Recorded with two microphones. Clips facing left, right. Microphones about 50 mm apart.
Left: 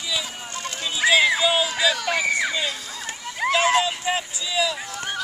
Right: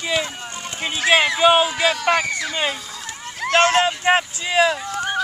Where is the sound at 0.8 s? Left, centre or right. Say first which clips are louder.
Right 1 dB; right.